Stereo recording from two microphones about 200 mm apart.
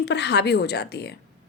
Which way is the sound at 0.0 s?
60° left (ahead or behind).